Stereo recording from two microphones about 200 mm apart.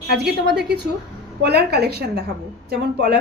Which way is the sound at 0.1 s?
55° right (ahead or behind).